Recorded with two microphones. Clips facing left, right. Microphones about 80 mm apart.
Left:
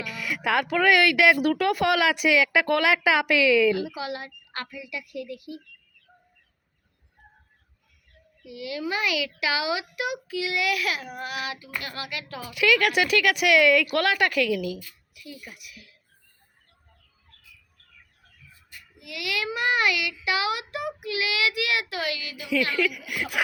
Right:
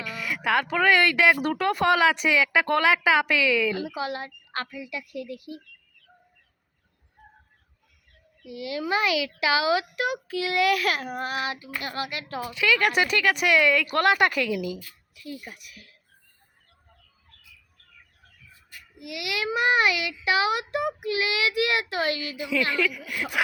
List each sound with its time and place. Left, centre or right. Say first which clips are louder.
0.4 s speech: even; centre
3.8 s a child's voice: right 1 dB; right
8.4 s a child's voice: right 2 dB; right
12.5 s speech: left 1 dB; centre
13.9 s a child's voice: right 2 dB; centre
15.1 s a child's voice: right 4 dB; right
18.9 s a child's voice: even; right
22.5 s a child's voice: left 1 dB; right
22.8 s speech: left 1 dB; centre